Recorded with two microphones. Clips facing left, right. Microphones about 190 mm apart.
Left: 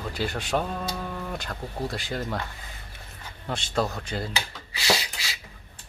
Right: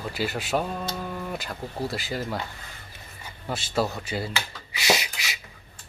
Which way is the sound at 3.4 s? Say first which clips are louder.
Right 1 dB; 5° right (ahead or behind).